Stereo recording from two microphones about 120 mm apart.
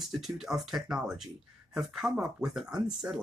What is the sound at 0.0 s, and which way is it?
Speech, centre (ahead or behind).